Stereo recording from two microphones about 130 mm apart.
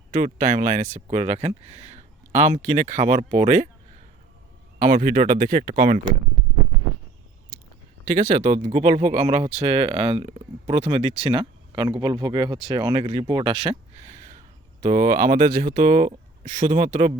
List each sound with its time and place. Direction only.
0.1 s speech: 80° right; by 3.7 s 60° right (ahead or behind)
4.9 s speech: 90° right
8.2 s speech: 70° right (ahead or behind); by 13.7 s 45° right (ahead or behind)
13.9 s speech: 65° right (ahead or behind); by 17.2 s 85° right